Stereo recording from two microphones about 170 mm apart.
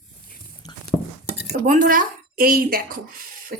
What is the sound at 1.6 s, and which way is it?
Speech, 50° right (ahead or behind).